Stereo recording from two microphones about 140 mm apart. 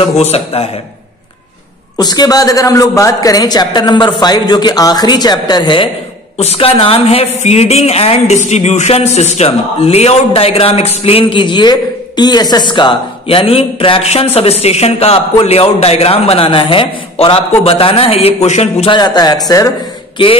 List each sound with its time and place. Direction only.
0.0 s speech: 50° left (ahead or behind)
2.0 s a man's voice: 30° left (ahead or behind)
6.3 s speech: 45° left (ahead or behind)
18.9 s a man's voice: 30° left (ahead or behind)